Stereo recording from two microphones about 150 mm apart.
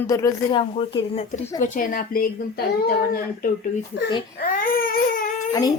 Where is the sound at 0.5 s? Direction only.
35° left (ahead or behind).